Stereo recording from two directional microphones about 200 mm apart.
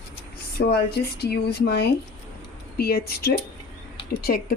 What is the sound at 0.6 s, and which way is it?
Speech, 55° left (ahead or behind).